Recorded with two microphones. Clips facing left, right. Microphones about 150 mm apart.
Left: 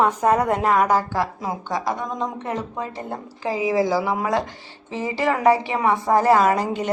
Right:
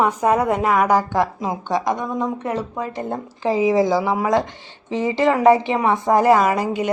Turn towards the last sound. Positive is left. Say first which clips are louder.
# right 1 dB
turn(degrees=-10)  # may be behind; listen again after turning